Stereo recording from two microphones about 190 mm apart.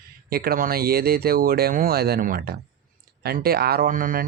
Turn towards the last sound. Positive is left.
turn(degrees=-45)  # may be behind; listen again after turning